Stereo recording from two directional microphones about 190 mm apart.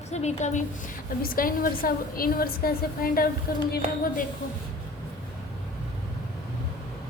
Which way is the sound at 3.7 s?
50° left (ahead or behind).